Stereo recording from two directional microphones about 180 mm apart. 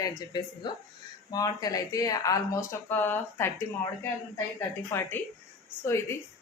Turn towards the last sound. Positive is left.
turn(degrees=15)  # may be behind; listen again after turning